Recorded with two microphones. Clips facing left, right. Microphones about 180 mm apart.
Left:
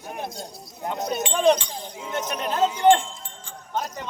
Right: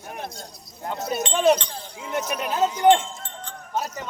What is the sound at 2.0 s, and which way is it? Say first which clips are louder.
Speech: right 1 dB; 10° right (ahead or behind).